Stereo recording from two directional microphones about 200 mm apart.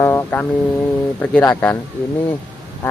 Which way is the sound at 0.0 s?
15° left (ahead or behind).